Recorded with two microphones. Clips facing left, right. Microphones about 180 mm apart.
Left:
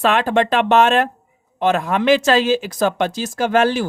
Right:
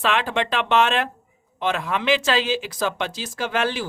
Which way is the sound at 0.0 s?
45° left (ahead or behind).